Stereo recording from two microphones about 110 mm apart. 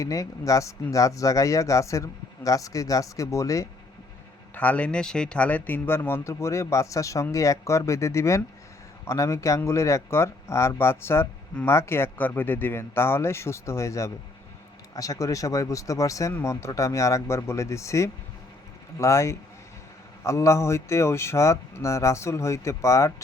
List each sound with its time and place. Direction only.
0.0 s speech: 30° left (ahead or behind)
4.5 s speech: 15° left (ahead or behind)